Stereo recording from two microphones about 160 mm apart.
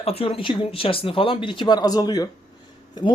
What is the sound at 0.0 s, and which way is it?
Speech, 35° left (ahead or behind).